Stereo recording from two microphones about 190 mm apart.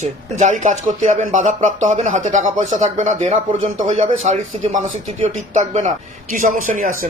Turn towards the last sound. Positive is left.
turn(degrees=-45)  # may be behind; listen again after turning